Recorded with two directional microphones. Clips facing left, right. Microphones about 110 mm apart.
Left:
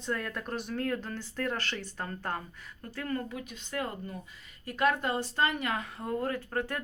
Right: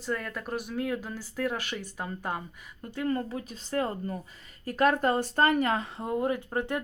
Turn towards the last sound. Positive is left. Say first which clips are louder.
# right 3 dB
turn(degrees=-20)  # may be behind; listen again after turning